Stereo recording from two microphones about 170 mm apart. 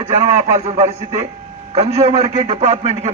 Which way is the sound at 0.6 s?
40° right (ahead or behind).